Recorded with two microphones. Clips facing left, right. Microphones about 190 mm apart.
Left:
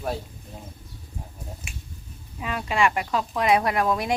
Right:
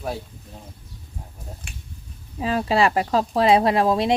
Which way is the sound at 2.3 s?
35° right (ahead or behind).